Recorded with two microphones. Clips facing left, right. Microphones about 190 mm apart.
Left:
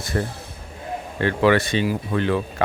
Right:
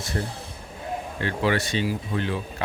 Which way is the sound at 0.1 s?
75° left (ahead or behind).